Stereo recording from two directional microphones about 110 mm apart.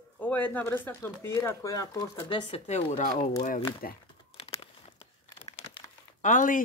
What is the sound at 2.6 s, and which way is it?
Speech, 85° left.